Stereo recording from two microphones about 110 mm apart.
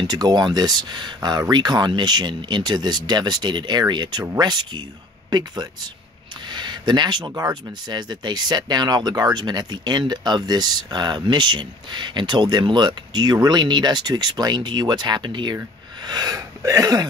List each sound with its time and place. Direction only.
0.0 s speech: 40° right (ahead or behind)